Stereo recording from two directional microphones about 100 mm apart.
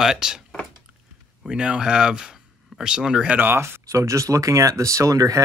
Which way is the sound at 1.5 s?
10° right (ahead or behind).